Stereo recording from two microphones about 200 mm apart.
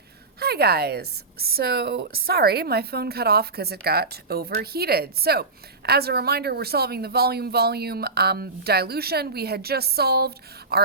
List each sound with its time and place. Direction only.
0.3 s a woman's voice: 50° right (ahead or behind)